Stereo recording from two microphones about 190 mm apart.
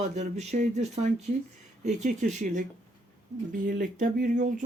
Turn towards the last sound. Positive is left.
turn(degrees=-40)  # may be behind; listen again after turning